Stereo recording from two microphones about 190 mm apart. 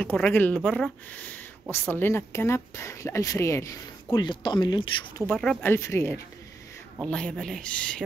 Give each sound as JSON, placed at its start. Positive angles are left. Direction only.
{"t": 0.0, "sound": "speech", "side_deg": 10}
{"t": 5.3, "sound": "speech", "side_deg": 5}